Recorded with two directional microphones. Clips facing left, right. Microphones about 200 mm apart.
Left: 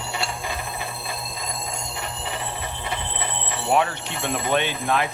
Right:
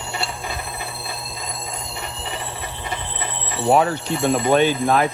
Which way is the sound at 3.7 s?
35° right (ahead or behind).